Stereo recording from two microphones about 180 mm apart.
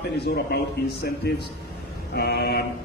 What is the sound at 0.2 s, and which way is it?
A man's voice, 60° left (ahead or behind).